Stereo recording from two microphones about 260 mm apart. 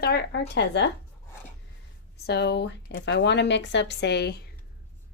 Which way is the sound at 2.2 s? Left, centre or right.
Left.